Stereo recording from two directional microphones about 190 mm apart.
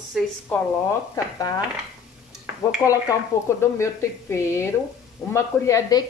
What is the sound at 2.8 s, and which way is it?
Speech, 15° left (ahead or behind).